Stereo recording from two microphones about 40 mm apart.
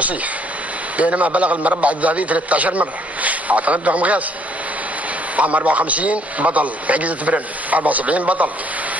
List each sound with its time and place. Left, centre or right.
0.9 s a man's voice: right
5.3 s a man's voice: right